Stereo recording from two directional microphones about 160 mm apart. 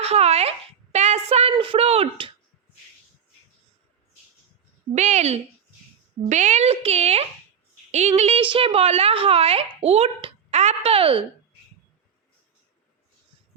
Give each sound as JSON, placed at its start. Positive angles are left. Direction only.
{"t": 0.0, "sound": "speech", "side_deg": -40}
{"t": 0.9, "sound": "a sound", "side_deg": -45}
{"t": 1.5, "sound": "a woman's voice", "side_deg": -30}
{"t": 4.9, "sound": "a woman's voice", "side_deg": -45}